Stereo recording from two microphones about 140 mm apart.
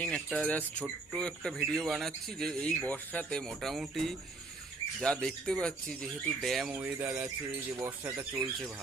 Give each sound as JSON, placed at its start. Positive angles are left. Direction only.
{"t": 0.0, "sound": "speech", "side_deg": 5}